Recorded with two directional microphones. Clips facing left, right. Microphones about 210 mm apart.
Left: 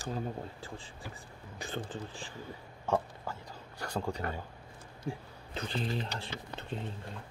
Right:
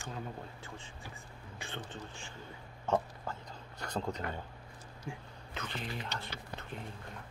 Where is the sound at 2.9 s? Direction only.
10° left (ahead or behind).